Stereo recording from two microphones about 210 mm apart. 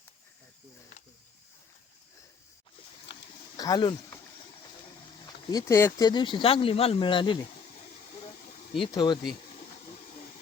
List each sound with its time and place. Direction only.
3.1 s a sound: 55° left (ahead or behind)
3.6 s speech: 20° left (ahead or behind)
5.5 s speech: 15° left (ahead or behind)
8.7 s speech: 25° left (ahead or behind)